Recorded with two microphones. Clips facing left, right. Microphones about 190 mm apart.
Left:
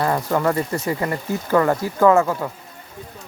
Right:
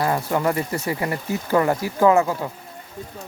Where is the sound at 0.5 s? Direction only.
30° left (ahead or behind).